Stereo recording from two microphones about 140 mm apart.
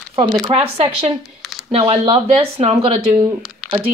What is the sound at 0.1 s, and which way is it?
Speech, 40° right (ahead or behind).